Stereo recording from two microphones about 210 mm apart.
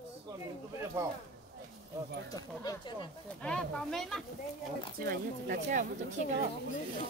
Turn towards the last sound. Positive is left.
turn(degrees=-35)  # may be behind; listen again after turning